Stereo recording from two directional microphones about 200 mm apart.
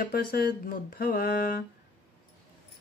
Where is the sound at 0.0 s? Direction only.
45° left (ahead or behind).